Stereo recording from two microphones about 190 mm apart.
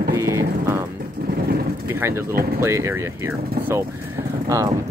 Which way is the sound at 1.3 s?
55° right (ahead or behind).